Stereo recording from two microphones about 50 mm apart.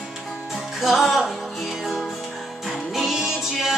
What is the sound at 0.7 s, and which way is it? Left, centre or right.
Music, centre.